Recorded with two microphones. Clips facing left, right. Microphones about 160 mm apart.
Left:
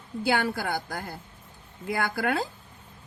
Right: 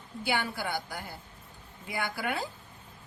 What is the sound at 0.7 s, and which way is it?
Speech, 45° left (ahead or behind).